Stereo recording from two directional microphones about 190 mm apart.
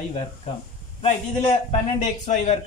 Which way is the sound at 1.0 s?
35° left (ahead or behind).